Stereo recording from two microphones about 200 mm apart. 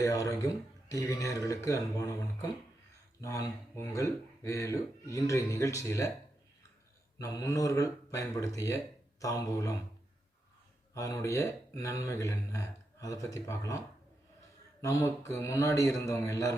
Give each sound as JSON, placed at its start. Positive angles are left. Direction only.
{"t": 0.0, "sound": "speech", "side_deg": 15}
{"t": 3.2, "sound": "speech", "side_deg": 15}
{"t": 7.2, "sound": "speech", "side_deg": 15}
{"t": 10.9, "sound": "speech", "side_deg": 15}